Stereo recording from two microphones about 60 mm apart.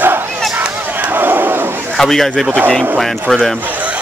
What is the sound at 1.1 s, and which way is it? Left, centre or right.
Battle cry, right.